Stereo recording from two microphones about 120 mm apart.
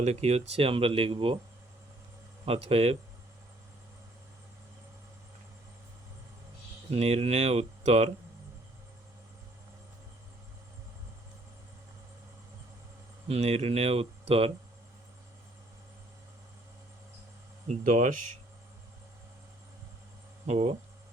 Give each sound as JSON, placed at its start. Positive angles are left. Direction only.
{"t": 0.0, "sound": "speech", "side_deg": -60}
{"t": 2.4, "sound": "speech", "side_deg": -55}
{"t": 6.9, "sound": "speech", "side_deg": -55}
{"t": 13.2, "sound": "speech", "side_deg": -60}
{"t": 17.7, "sound": "speech", "side_deg": -85}
{"t": 20.5, "sound": "speech", "side_deg": -60}